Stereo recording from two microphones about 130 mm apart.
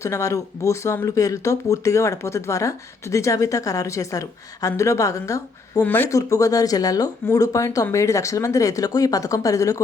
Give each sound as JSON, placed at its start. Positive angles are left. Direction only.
{"t": 0.0, "sound": "speech", "side_deg": 25}
{"t": 5.8, "sound": "speech", "side_deg": 15}
{"t": 6.1, "sound": "speech", "side_deg": 25}